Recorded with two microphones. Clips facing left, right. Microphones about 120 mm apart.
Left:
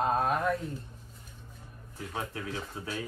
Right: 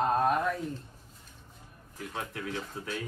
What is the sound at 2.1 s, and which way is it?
Speech, 30° left (ahead or behind).